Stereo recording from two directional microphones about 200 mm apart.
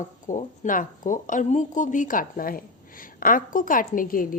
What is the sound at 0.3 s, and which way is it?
A woman's voice, 40° left (ahead or behind).